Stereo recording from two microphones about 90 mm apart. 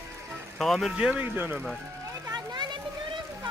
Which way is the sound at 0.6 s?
Centre (ahead or behind).